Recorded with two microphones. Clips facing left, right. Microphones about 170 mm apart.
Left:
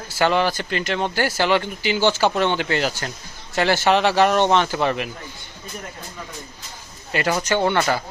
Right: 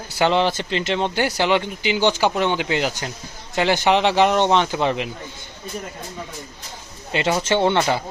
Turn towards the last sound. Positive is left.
turn(degrees=-25)  # may be behind; listen again after turning